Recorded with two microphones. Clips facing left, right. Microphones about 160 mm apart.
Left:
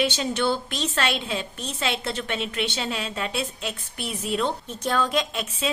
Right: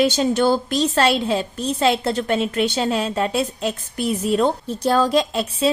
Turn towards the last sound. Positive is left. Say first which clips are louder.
# right 7 dB
turn(degrees=-35)  # may be behind; listen again after turning